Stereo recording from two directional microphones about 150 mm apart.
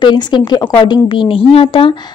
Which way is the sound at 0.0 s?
30° left (ahead or behind).